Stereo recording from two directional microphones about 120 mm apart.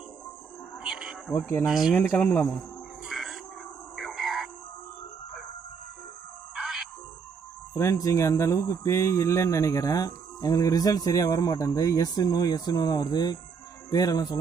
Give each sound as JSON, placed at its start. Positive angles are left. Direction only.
{"t": 0.8, "sound": "cricket", "side_deg": -5}
{"t": 1.3, "sound": "speech", "side_deg": 20}
{"t": 1.7, "sound": "speech", "side_deg": -5}
{"t": 2.1, "sound": "speech", "side_deg": 15}
{"t": 3.1, "sound": "a sound", "side_deg": 0}
{"t": 6.5, "sound": "music", "side_deg": -5}
{"t": 7.7, "sound": "speech", "side_deg": 25}